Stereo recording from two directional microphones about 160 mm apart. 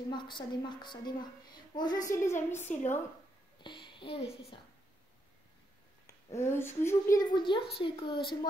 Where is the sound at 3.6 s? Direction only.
30° left (ahead or behind).